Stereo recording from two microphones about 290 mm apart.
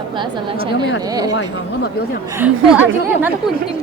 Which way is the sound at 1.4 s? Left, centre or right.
Left.